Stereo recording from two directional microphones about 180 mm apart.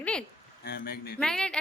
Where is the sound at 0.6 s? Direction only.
60° left (ahead or behind).